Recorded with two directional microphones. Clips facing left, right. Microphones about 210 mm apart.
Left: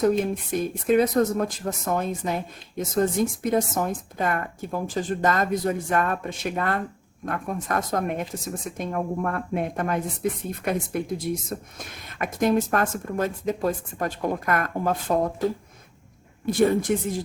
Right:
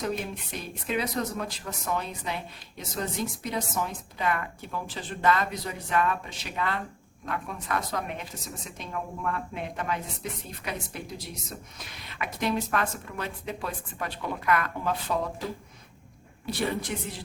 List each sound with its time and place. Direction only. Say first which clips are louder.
0.5 s speech: left 11 dB; 50° left (ahead or behind)
16.5 s speech: left 10 dB; 45° left (ahead or behind)